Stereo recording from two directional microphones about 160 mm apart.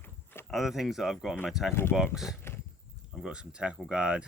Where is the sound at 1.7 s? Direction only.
15° left (ahead or behind).